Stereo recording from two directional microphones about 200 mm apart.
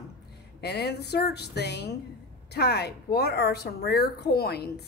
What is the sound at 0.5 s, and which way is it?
A woman's voice, 55° left (ahead or behind).